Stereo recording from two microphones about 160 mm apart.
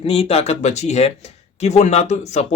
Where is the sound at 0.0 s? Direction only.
40° left (ahead or behind).